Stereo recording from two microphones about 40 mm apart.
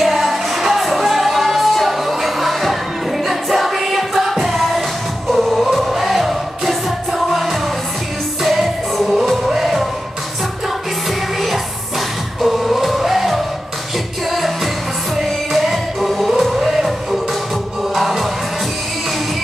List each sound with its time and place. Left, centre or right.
0.0 s music: centre
11.1 s music: centre